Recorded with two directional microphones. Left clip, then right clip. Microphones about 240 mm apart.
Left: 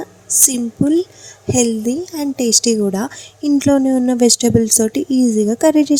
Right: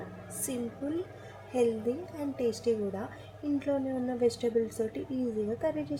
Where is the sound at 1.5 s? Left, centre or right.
Left.